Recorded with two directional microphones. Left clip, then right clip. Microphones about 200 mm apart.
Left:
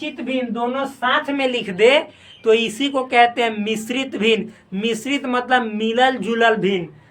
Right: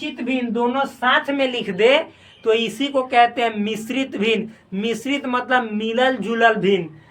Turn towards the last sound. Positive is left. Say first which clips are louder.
# even
turn(degrees=15)  # may be behind; listen again after turning